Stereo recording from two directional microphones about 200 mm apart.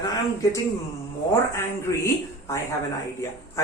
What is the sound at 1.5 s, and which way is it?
Speech, 15° left (ahead or behind).